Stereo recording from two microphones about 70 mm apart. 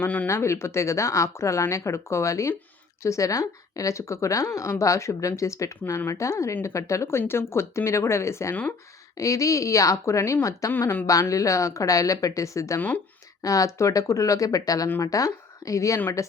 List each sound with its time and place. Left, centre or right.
0.0 s speech: left
0.3 s speech: left
10.7 s speech: left
11.0 s speech: left